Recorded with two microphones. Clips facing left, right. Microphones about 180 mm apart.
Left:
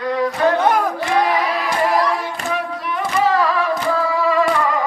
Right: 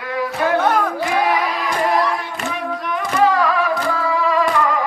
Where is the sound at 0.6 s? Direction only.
10° left (ahead or behind).